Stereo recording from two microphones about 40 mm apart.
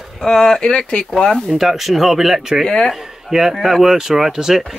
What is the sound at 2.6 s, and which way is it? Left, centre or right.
Speech, centre.